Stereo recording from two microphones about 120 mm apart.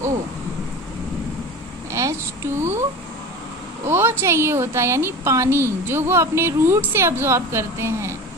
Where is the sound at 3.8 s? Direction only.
20° right (ahead or behind).